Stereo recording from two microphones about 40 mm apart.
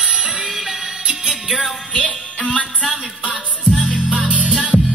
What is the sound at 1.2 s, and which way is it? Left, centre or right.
Music, centre.